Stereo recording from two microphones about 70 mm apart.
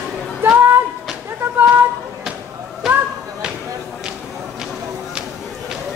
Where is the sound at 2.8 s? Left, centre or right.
Centre.